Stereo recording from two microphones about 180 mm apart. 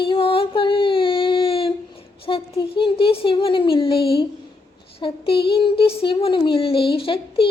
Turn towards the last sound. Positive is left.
turn(degrees=30)  # may be behind; listen again after turning